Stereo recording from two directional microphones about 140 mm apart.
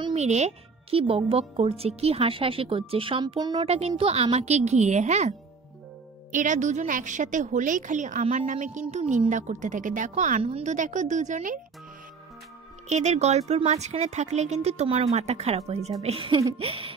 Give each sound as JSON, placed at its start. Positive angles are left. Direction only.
{"t": 0.1, "sound": "speech", "side_deg": -50}
{"t": 3.6, "sound": "speech", "side_deg": -45}
{"t": 6.3, "sound": "a woman's voice", "side_deg": -65}
{"t": 10.4, "sound": "a woman's voice", "side_deg": -50}
{"t": 12.8, "sound": "speech", "side_deg": -55}